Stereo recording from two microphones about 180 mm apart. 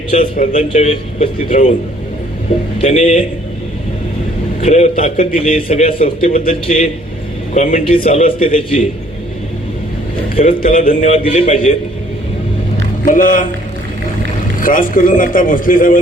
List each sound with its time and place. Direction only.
0.3 s a man's voice: 45° left (ahead or behind)
2.8 s a man's voice: 40° left (ahead or behind)
4.6 s a man's voice: 40° left (ahead or behind)
10.4 s a man's voice: 50° left (ahead or behind)
13.1 s a man's voice: 50° left (ahead or behind)
14.6 s a man's voice: 50° left (ahead or behind)